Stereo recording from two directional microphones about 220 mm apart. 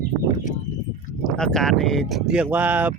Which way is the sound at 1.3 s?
5° left (ahead or behind).